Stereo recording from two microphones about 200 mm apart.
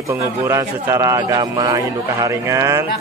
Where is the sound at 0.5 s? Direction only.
15° right (ahead or behind).